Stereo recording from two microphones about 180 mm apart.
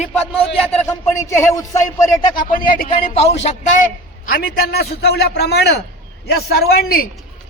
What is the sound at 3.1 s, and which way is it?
A man's voice, 35° left (ahead or behind).